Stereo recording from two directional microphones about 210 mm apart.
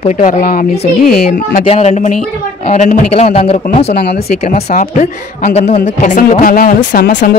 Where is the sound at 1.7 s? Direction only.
30° left (ahead or behind).